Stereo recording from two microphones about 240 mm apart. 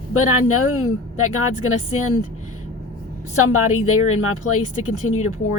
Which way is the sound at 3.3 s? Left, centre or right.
Left.